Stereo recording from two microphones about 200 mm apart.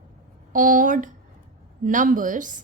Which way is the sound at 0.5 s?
40° right (ahead or behind).